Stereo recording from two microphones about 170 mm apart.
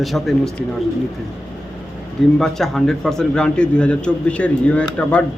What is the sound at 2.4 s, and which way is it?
A man's voice, centre (ahead or behind).